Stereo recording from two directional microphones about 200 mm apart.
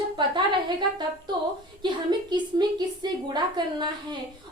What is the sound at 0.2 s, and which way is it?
A woman's voice, 20° right (ahead or behind).